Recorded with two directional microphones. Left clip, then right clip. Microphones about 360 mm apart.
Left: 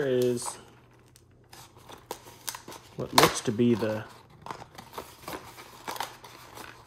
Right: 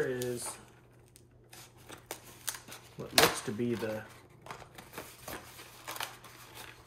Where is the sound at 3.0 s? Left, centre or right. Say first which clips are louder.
Left 5 dB; centre.